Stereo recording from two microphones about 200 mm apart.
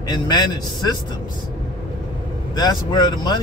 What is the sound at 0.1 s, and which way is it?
Speech, 20° left (ahead or behind).